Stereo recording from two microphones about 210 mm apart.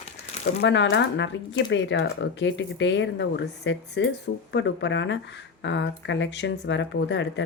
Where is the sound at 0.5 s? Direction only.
55° left (ahead or behind).